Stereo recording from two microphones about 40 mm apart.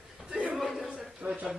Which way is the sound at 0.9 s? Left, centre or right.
Right.